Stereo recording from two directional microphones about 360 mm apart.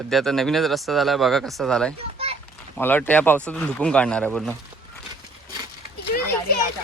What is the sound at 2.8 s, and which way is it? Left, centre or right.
Speech, centre.